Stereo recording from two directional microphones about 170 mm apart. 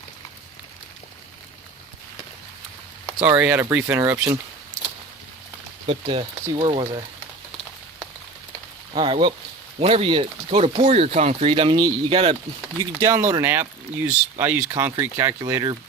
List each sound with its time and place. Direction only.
3.2 s speech: 10° right (ahead or behind)
5.8 s speech: 30° right (ahead or behind)
9.0 s speech: 30° right (ahead or behind)
13.0 s speech: 15° right (ahead or behind)